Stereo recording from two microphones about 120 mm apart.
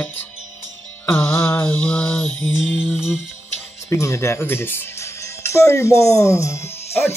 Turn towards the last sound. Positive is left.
turn(degrees=20)  # may be behind; listen again after turning